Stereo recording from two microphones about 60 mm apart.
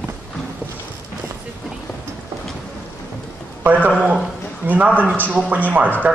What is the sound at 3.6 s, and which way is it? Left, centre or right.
A man's voice, right.